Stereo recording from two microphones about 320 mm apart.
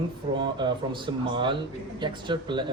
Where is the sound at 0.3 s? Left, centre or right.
Centre.